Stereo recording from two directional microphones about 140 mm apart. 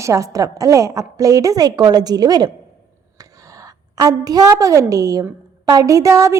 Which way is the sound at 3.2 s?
25° right (ahead or behind).